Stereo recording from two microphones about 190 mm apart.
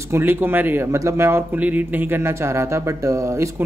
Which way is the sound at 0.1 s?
10° right (ahead or behind).